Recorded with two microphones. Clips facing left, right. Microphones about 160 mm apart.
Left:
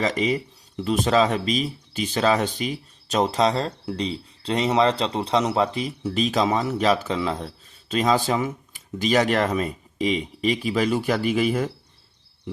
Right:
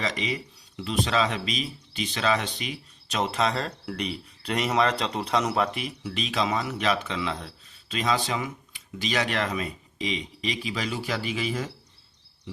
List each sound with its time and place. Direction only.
0.0 s speech: 40° left (ahead or behind)